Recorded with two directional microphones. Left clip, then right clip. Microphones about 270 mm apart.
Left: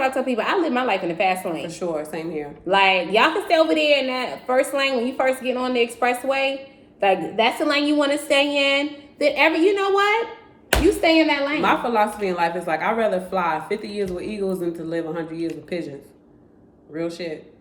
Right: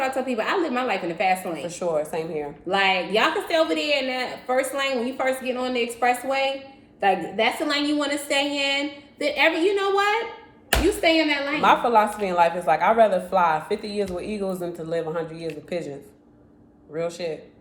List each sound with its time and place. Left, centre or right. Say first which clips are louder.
0.0 s a woman's voice: left 3 dB; centre
1.8 s speech: right 4 dB; centre
2.6 s a woman's voice: left 4 dB; centre
11.6 s speech: right 4 dB; centre